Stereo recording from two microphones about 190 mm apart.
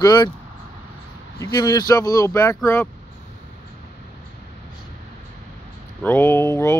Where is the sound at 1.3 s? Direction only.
20° left (ahead or behind).